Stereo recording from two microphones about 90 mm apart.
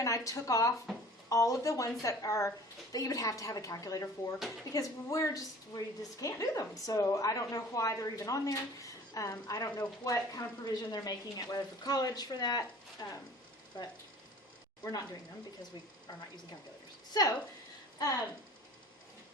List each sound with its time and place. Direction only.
0.0 s a woman's voice: 40° left (ahead or behind)
0.9 s a sound: centre (ahead or behind)
1.3 s a woman's voice: 40° left (ahead or behind)
4.4 s speech: centre (ahead or behind)
4.7 s a woman's voice: 40° left (ahead or behind)